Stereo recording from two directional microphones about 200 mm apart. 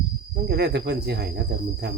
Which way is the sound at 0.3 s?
55° right (ahead or behind).